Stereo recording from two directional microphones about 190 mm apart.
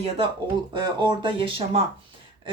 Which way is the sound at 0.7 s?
25° right (ahead or behind).